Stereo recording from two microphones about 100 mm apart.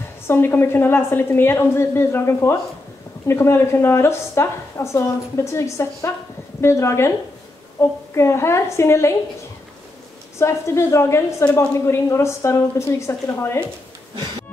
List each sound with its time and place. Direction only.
0.3 s a woman's voice: 25° left (ahead or behind)
10.4 s a woman's voice: 25° left (ahead or behind)